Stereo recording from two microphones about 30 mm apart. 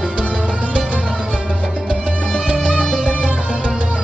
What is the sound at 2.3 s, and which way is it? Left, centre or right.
Music, right.